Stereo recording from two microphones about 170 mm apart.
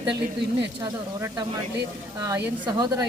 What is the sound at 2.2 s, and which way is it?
Speech, 15° right (ahead or behind).